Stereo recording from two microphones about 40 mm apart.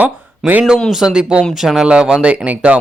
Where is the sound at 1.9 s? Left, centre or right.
Right.